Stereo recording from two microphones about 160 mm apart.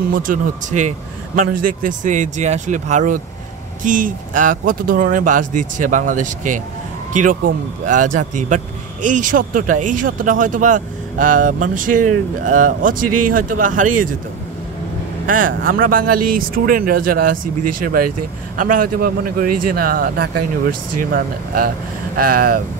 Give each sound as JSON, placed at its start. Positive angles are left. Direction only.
{"t": 0.1, "sound": "a man's voice", "side_deg": -55}
{"t": 15.3, "sound": "a man's voice", "side_deg": -60}
{"t": 18.6, "sound": "a man's voice", "side_deg": -60}